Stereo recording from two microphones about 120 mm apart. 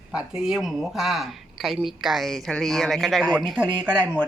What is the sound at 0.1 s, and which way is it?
Speech, 5° right (ahead or behind).